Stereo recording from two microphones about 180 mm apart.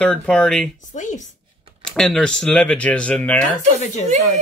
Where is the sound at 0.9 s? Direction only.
45° left (ahead or behind).